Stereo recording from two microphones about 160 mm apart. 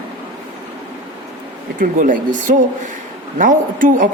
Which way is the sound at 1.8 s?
55° right (ahead or behind).